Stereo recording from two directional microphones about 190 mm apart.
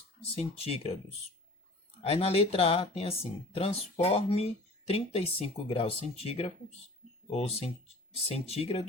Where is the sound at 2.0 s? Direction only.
30° left (ahead or behind).